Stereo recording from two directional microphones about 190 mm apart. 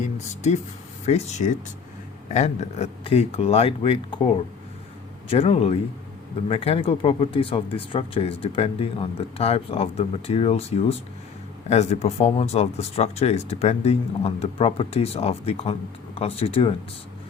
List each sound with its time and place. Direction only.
0.0 s speech: 35° left (ahead or behind)
5.3 s speech: 35° left (ahead or behind)